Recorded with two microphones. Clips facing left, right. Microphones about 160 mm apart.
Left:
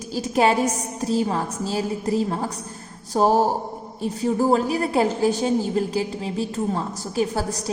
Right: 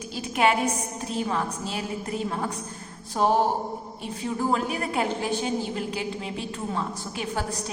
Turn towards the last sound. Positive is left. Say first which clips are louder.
# left 5 dB
turn(degrees=35)  # may be behind; listen again after turning